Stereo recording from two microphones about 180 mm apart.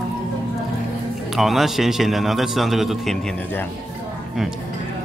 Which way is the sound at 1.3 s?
Centre (ahead or behind).